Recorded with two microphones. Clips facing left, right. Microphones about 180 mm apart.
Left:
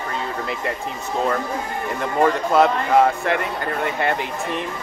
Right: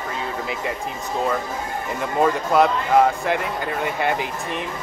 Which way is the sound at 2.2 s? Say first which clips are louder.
Left 1 dB; centre (ahead or behind).